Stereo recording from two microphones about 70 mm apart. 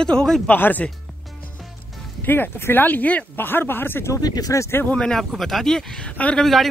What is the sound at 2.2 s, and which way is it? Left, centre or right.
Speech, left.